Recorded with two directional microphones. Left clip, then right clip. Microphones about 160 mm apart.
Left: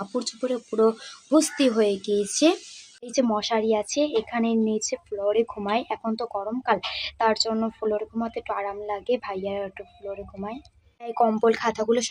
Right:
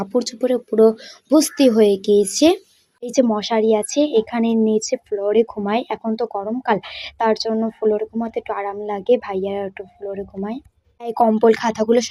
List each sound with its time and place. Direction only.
0.0 s a woman's voice: 30° right (ahead or behind)